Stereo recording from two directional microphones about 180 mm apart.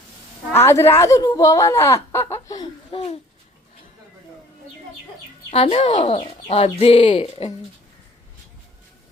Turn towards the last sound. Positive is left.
turn(degrees=35)  # may be behind; listen again after turning